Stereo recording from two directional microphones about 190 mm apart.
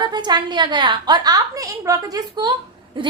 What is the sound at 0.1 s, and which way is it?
A woman's voice, 20° right (ahead or behind).